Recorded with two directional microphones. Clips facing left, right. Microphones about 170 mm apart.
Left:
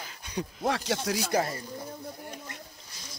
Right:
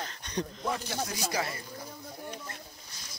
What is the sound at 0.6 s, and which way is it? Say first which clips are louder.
Speech: left 9 dB; 90° left.